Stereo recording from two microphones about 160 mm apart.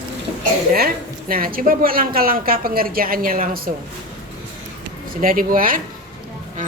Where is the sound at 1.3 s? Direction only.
65° right (ahead or behind).